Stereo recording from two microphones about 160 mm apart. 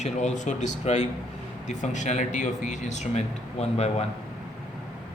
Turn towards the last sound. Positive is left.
turn(degrees=40)  # may be behind; listen again after turning